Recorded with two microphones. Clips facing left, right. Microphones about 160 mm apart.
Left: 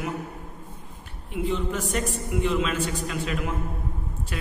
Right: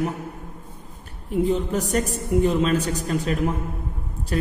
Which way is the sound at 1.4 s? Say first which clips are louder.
Right 2 dB; 40° right (ahead or behind).